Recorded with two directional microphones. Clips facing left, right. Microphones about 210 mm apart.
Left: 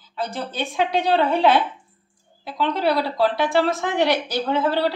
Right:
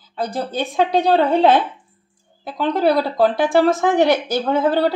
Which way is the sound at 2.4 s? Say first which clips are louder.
Right 4 dB; 45° right (ahead or behind).